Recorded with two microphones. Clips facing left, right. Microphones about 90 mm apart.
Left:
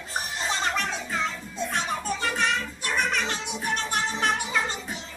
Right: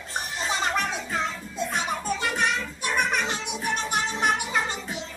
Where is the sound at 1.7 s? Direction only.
15° right (ahead or behind).